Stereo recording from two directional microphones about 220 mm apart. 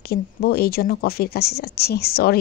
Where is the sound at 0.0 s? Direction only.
45° left (ahead or behind).